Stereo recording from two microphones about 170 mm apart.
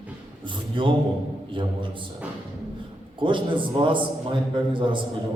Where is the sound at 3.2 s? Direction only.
30° right (ahead or behind).